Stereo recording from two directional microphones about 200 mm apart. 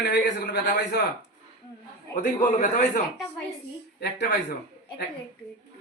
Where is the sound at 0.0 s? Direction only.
60° left (ahead or behind).